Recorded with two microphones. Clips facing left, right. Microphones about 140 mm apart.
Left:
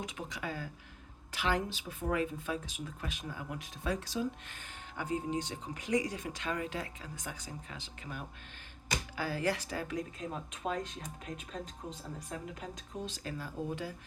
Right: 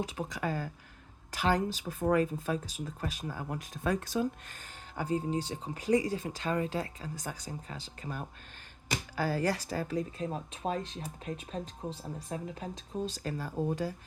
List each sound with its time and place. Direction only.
0.0 s speech: 35° right (ahead or behind)
4.9 s speech: 35° right (ahead or behind)